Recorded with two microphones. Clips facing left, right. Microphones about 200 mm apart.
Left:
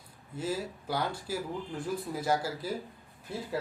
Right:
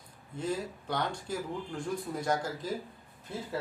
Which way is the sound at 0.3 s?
5° left (ahead or behind).